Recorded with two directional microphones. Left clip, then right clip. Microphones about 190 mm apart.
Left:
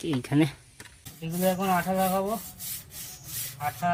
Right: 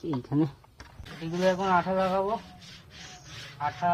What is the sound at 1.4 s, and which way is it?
Speech, centre (ahead or behind).